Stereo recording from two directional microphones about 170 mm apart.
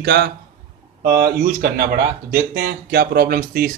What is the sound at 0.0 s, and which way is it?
Speech, 70° right (ahead or behind).